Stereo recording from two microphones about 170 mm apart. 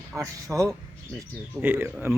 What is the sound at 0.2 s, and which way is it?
Speech, 20° right (ahead or behind).